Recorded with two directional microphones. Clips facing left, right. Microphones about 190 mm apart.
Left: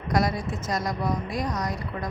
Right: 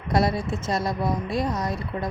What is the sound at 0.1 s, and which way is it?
Speech, 25° right (ahead or behind).